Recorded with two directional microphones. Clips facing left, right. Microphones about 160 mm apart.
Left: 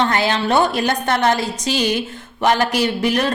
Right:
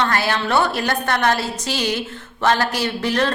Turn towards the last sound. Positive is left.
turn(degrees=15)  # may be behind; listen again after turning